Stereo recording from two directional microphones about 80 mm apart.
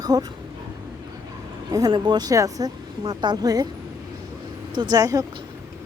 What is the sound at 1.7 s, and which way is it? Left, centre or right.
Speech, right.